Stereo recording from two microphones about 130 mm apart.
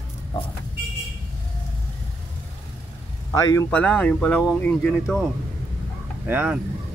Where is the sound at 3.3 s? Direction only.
25° left (ahead or behind).